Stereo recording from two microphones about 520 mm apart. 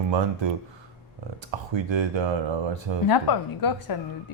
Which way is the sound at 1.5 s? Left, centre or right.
Right.